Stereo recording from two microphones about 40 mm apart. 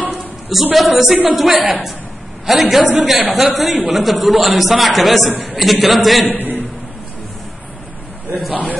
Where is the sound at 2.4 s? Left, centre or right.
Centre.